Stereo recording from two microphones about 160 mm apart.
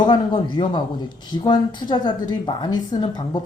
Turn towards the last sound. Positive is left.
turn(degrees=25)  # may be behind; listen again after turning